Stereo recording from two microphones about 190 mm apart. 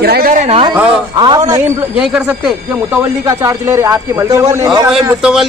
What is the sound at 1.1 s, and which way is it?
Speech, 20° right (ahead or behind).